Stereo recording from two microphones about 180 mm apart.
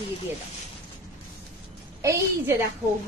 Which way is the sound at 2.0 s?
15° right (ahead or behind).